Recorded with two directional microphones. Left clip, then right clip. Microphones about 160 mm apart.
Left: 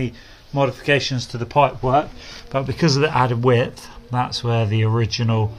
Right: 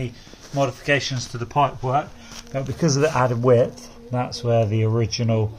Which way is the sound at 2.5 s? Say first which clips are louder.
Left 3 dB; 60° left (ahead or behind).